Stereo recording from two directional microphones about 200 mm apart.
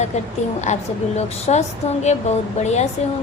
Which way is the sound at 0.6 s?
35° left (ahead or behind).